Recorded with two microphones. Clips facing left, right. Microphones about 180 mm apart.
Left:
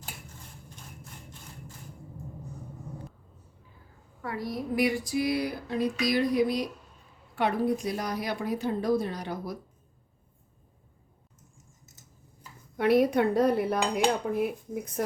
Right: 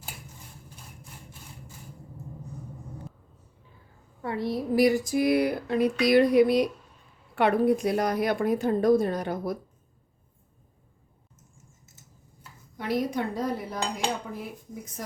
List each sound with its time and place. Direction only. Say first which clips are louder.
4.2 s a sound: right 4 dB; 25° right (ahead or behind); by 6.7 s 65° right (ahead or behind)
7.3 s a woman's voice: right 5 dB; 60° right (ahead or behind)
12.7 s dishes: left 6 dB; 65° left (ahead or behind)